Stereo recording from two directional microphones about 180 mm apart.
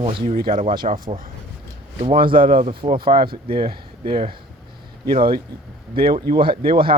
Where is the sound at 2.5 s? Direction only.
35° right (ahead or behind).